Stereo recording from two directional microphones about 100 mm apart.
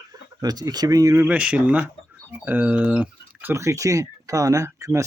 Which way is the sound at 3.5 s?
30° right (ahead or behind).